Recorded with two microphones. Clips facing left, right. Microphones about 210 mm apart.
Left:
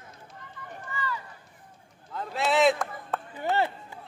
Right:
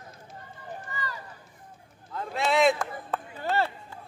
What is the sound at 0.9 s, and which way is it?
Run, 40° right (ahead or behind).